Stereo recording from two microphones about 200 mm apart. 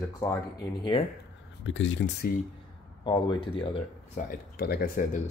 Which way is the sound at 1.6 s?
70° left (ahead or behind).